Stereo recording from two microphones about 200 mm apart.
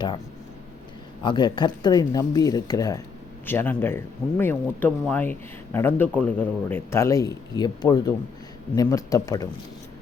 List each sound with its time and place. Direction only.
1.2 s speech: 25° left (ahead or behind)